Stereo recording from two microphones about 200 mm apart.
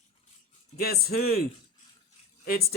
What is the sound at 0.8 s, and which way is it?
Speech, 50° left (ahead or behind).